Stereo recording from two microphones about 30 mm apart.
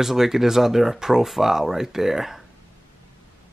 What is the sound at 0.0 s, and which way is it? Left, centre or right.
Speech, centre.